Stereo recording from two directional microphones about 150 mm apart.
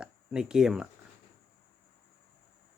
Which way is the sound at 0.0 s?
5° right (ahead or behind).